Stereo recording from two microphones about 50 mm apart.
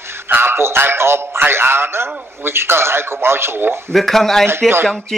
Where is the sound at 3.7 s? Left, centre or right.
Centre.